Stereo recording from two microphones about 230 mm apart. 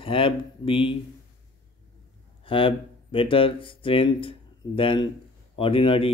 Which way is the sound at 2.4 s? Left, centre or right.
Left.